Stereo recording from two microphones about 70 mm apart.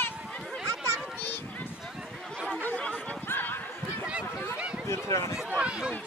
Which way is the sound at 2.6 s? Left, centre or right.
Left.